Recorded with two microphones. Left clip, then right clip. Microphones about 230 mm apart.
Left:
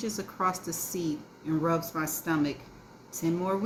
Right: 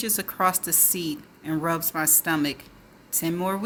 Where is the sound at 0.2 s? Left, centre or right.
Right.